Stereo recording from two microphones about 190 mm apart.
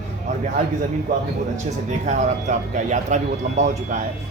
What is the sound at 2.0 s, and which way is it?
Speech, 40° right (ahead or behind).